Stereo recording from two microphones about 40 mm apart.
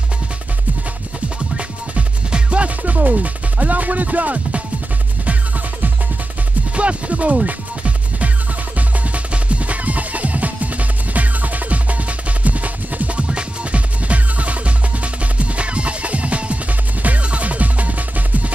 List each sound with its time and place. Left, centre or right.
2.0 s music: right
6.7 s music: right
13.3 s music: right